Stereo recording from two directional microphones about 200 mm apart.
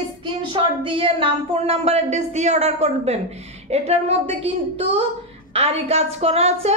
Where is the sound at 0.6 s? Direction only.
25° right (ahead or behind).